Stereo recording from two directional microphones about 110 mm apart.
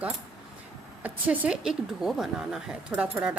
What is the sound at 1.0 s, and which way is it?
A woman's voice, 10° right (ahead or behind).